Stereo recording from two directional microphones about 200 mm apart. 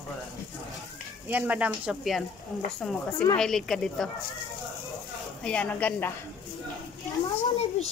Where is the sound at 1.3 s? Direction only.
5° right (ahead or behind).